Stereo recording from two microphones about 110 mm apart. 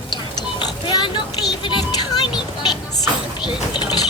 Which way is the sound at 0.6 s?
45° left (ahead or behind).